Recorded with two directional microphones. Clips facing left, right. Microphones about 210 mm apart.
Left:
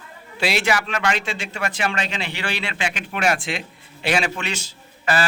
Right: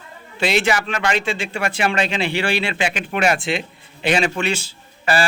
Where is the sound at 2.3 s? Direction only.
10° right (ahead or behind).